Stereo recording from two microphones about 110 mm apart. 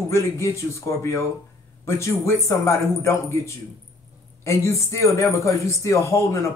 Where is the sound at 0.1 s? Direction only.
25° left (ahead or behind).